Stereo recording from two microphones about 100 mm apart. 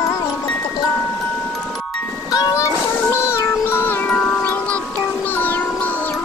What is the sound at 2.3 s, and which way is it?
Music, 30° left (ahead or behind).